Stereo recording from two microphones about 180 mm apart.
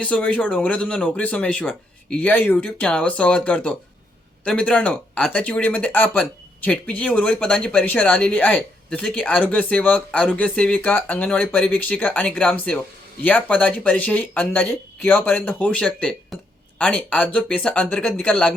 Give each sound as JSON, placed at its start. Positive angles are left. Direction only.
{"t": 0.0, "sound": "speech", "side_deg": 5}